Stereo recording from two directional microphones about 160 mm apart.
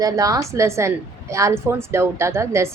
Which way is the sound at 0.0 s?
20° right (ahead or behind).